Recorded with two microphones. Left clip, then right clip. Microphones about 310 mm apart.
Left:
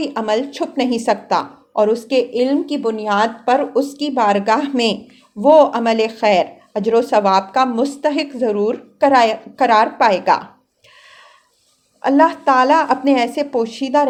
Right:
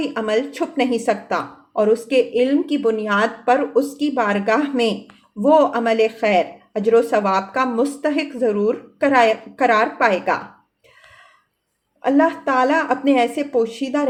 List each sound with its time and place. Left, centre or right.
0.0 s speech: centre
12.0 s speech: centre